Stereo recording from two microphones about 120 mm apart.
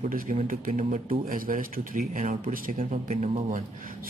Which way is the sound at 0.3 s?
90° right.